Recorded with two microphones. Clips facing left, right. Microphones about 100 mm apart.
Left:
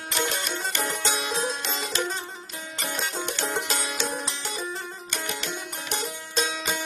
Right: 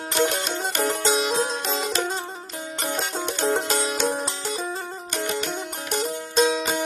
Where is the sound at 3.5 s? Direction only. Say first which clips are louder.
Right 6 dB; 35° right (ahead or behind).